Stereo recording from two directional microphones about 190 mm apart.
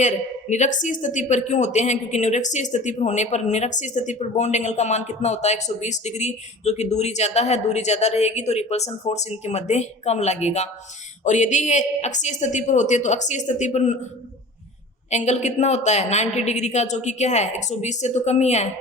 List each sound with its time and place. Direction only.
0.5 s speech: 40° left (ahead or behind)
15.1 s speech: 35° left (ahead or behind)